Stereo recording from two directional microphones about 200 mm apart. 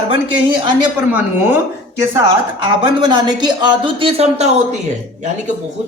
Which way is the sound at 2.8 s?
20° right (ahead or behind).